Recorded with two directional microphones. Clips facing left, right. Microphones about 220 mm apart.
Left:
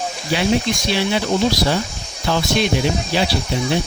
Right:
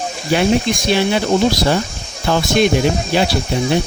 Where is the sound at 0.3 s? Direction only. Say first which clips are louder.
Right 4 dB; 50° right (ahead or behind).